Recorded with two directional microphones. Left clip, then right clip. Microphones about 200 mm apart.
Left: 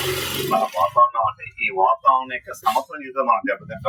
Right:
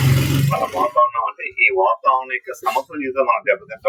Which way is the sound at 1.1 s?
35° right (ahead or behind).